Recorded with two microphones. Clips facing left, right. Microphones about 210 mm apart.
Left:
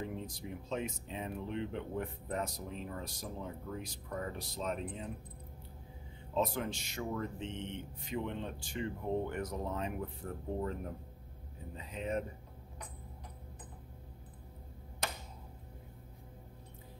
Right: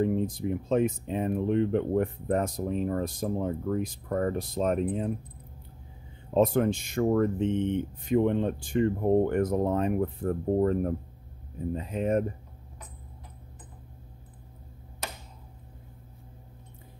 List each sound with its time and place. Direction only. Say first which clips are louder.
0.0 s speech: right 15 dB; 50° right (ahead or behind)
6.3 s speech: right 11 dB; 50° right (ahead or behind)